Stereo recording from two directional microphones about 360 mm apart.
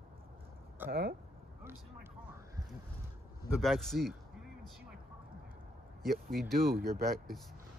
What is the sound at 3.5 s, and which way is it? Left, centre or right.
Speech, centre.